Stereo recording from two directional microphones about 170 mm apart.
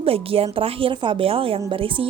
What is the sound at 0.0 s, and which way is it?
A woman's voice, 35° right (ahead or behind).